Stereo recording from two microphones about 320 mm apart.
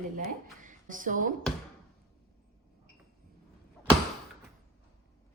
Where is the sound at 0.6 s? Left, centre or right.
Right.